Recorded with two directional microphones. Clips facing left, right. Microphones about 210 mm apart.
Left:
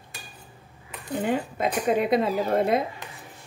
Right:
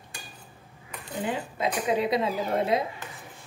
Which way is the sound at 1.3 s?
50° left (ahead or behind).